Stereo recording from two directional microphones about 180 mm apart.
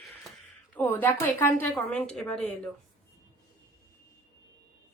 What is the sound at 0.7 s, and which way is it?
A woman's voice, 10° left (ahead or behind).